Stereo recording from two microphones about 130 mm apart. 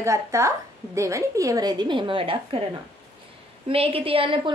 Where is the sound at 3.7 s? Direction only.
45° right (ahead or behind).